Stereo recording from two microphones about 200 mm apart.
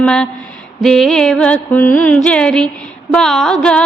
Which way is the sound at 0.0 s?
5° left (ahead or behind).